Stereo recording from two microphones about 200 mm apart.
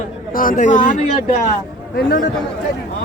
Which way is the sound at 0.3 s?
40° left (ahead or behind).